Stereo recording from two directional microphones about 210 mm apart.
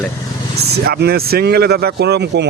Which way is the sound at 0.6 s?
50° right (ahead or behind).